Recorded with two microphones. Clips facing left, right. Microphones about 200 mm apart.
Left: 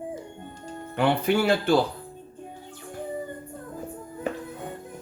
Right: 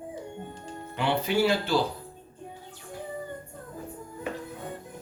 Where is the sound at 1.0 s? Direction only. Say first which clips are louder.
Left 3 dB; 55° left (ahead or behind).